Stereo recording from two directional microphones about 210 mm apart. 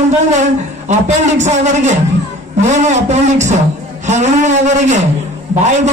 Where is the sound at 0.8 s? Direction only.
35° right (ahead or behind).